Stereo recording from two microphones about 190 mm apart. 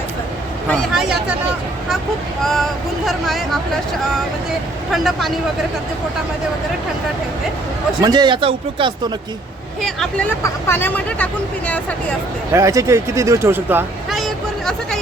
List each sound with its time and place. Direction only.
0.7 s speech: centre (ahead or behind)
2.4 s speech: centre (ahead or behind)
4.9 s speech: centre (ahead or behind)
8.0 s speech: 20° right (ahead or behind)
9.8 s speech: 5° left (ahead or behind)
12.5 s speech: 15° right (ahead or behind)
14.1 s a sound: centre (ahead or behind)